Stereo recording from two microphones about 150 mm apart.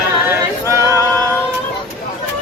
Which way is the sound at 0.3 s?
20° right (ahead or behind).